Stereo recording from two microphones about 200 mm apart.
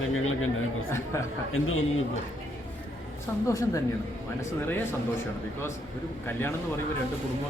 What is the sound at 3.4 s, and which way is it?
Speech, 15° left (ahead or behind).